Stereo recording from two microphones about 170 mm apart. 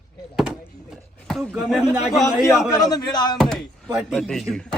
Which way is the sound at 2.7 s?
20° left (ahead or behind).